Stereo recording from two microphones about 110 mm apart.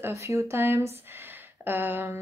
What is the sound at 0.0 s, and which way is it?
Speech, 25° right (ahead or behind).